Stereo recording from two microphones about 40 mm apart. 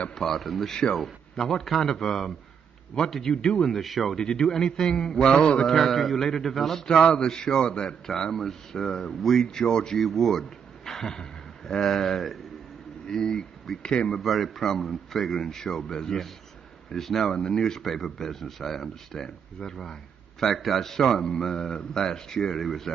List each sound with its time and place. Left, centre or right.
0.1 s speech: centre
3.3 s speech: left
3.7 s speech: centre
4.2 s speech: centre
5.7 s speech: centre; by 7.9 s left
8.1 s speech: centre
13.0 s speech: centre
14.2 s speech: centre
17.3 s speech: left